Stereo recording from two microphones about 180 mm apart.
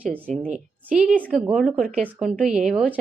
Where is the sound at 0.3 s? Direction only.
40° right (ahead or behind).